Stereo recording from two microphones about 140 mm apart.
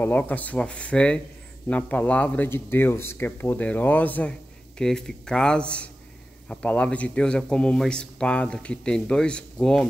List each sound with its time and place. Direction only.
0.0 s speech: 10° left (ahead or behind)